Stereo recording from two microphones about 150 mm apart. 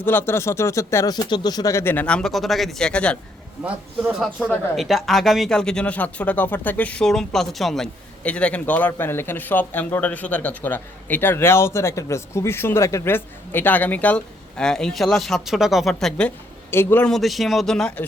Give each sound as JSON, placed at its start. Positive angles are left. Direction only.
{"t": 0.0, "sound": "speech", "side_deg": 15}
{"t": 4.4, "sound": "speech", "side_deg": 10}
{"t": 4.8, "sound": "speech", "side_deg": 0}
{"t": 17.1, "sound": "speech", "side_deg": 0}